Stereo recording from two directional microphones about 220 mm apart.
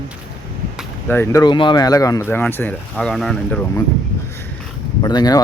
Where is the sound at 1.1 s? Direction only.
10° left (ahead or behind).